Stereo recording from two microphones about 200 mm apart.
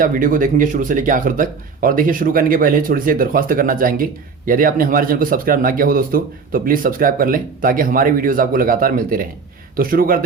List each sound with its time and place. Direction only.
0.0 s speech: 40° right (ahead or behind)